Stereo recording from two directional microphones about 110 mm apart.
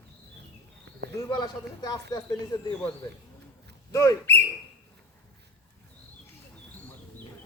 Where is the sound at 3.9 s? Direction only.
25° left (ahead or behind).